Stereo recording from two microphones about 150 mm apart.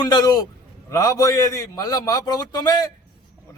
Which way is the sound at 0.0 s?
25° left (ahead or behind).